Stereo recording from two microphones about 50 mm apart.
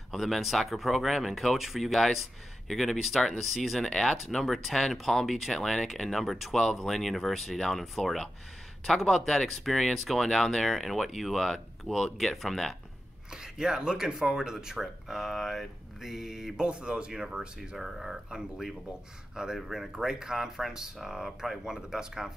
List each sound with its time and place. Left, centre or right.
0.1 s speech: centre
13.3 s speech: centre